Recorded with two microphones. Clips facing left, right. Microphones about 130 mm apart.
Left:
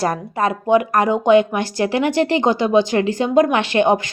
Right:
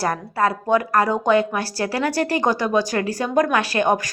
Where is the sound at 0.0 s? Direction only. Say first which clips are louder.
Left 1 dB; 20° left (ahead or behind).